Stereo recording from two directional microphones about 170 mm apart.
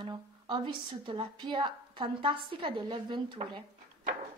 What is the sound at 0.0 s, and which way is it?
A woman's voice, 25° right (ahead or behind).